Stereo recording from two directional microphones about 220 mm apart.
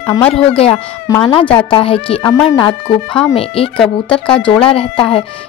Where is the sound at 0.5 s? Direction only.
25° left (ahead or behind).